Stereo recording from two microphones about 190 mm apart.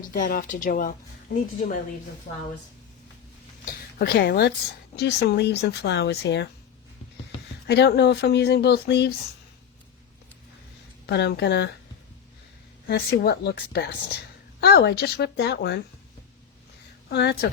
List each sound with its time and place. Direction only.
0.0 s a woman's voice: 45° left (ahead or behind)
3.9 s speech: 55° left (ahead or behind)
7.7 s speech: 60° left (ahead or behind)
11.0 s speech: 60° left (ahead or behind)
12.9 s speech: 60° left (ahead or behind)
17.1 s speech: 60° left (ahead or behind)